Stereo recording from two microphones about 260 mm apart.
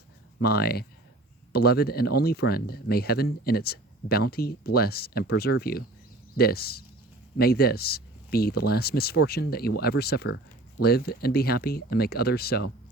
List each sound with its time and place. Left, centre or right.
0.3 s speech: left